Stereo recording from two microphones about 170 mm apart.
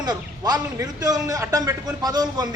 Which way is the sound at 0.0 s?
25° right (ahead or behind).